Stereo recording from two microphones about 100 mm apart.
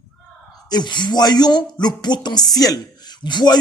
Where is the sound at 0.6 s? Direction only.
45° left (ahead or behind).